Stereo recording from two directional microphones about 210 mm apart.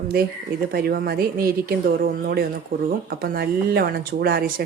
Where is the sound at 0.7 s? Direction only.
45° right (ahead or behind).